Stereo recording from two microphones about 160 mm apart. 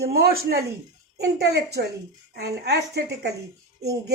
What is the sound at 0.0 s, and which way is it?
Speech, 80° right.